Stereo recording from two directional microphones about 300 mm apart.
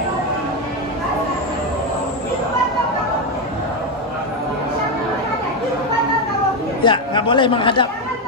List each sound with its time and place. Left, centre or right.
6.8 s a man's voice: centre